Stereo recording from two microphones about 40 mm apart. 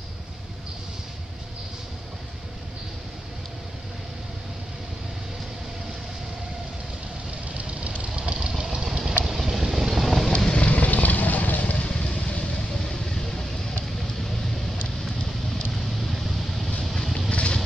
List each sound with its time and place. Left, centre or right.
7.5 s vehicle: right
8.4 s vehicle: centre
10.6 s vehicle: left
11.7 s vehicle: left
12.7 s vehicle: centre
15.8 s vehicle: centre
17.3 s vehicle: left